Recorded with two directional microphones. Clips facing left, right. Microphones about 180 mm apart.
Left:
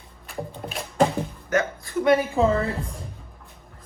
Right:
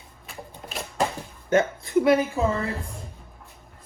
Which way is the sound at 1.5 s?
25° right (ahead or behind).